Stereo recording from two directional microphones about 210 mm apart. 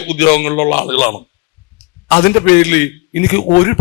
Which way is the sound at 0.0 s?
5° left (ahead or behind).